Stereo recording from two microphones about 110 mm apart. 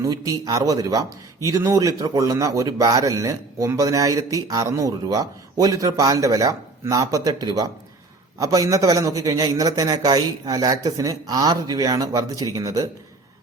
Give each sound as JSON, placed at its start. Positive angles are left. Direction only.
{"t": 0.0, "sound": "a man's voice", "side_deg": -30}